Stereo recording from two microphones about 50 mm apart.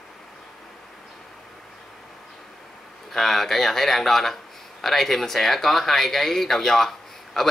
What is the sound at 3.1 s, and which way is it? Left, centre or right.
Speech, centre.